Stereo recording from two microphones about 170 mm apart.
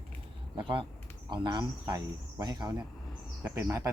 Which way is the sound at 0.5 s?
30° right (ahead or behind).